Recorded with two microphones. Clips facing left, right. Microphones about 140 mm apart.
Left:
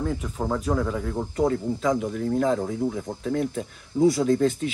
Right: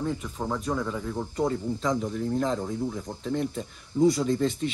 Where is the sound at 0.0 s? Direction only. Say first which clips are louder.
Left 2 dB; 5° left (ahead or behind).